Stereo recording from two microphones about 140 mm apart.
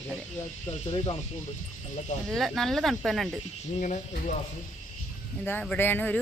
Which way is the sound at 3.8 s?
60° left (ahead or behind).